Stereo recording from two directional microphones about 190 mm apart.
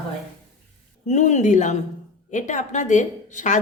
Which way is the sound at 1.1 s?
40° left (ahead or behind).